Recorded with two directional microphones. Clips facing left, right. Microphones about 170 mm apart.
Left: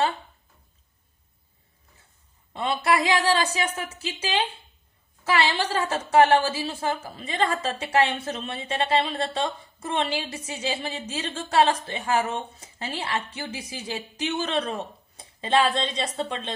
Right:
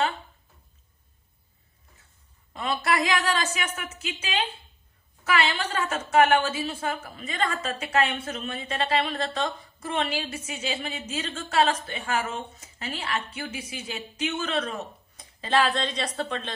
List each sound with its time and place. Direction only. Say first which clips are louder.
2.5 s a woman's voice: left 3 dB; 25° left (ahead or behind)
15.1 s speech: left 2 dB; 25° left (ahead or behind)